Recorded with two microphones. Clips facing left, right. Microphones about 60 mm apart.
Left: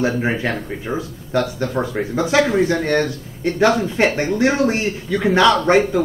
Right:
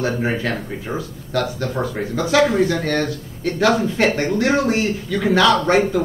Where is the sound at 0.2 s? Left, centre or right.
Centre.